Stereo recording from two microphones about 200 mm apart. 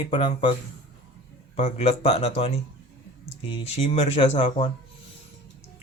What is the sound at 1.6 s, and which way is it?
Speech, 35° left (ahead or behind).